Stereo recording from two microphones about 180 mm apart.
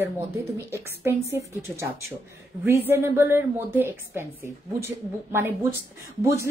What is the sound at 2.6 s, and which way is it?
Speech, 15° right (ahead or behind).